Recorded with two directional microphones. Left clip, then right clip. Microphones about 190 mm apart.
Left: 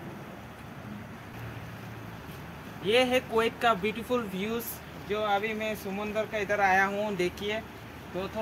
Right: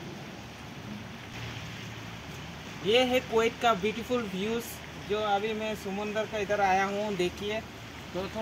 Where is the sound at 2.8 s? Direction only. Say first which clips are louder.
Even; centre (ahead or behind).